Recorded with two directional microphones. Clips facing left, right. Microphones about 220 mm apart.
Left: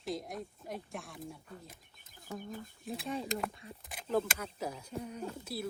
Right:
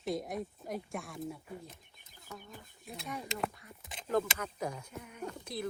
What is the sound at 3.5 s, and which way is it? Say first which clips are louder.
Speech: left 5 dB; 25° left (ahead or behind).